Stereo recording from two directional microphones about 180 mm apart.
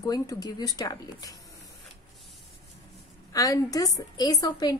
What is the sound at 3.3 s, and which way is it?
A woman's voice, 20° left (ahead or behind).